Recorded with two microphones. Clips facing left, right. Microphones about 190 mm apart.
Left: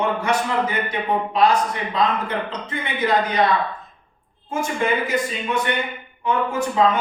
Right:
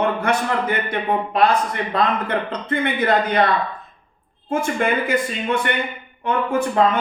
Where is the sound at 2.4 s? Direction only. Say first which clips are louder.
Right 6 dB; 55° right (ahead or behind).